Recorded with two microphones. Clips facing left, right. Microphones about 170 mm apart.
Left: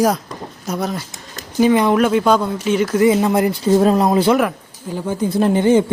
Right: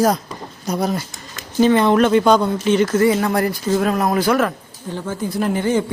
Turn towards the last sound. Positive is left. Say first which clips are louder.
# left 5 dB
turn(degrees=20)  # may be behind; listen again after turning